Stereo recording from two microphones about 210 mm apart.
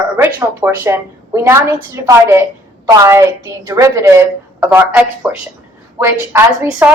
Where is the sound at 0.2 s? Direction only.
15° right (ahead or behind).